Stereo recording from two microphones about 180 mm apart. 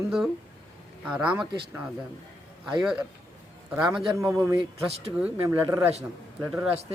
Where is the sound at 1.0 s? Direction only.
5° right (ahead or behind).